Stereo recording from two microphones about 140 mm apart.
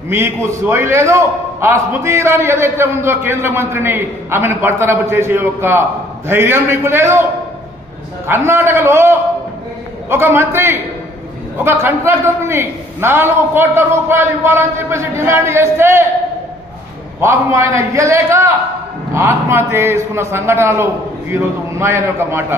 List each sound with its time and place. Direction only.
0.1 s a man's voice: 20° right (ahead or behind)
8.3 s a man's voice: 15° right (ahead or behind)
17.2 s a man's voice: 20° right (ahead or behind)